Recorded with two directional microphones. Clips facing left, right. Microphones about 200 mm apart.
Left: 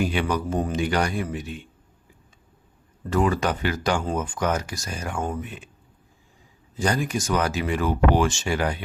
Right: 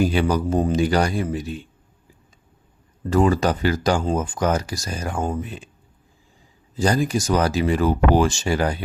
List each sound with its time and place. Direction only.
0.0 s speech: 35° right (ahead or behind)
3.1 s speech: 35° right (ahead or behind)
6.7 s speech: 35° right (ahead or behind)